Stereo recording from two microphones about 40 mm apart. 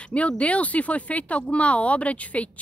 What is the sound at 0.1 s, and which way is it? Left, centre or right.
Speech, left.